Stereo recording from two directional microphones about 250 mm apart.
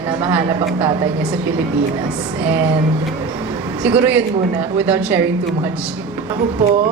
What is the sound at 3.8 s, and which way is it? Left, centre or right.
A woman's voice, centre.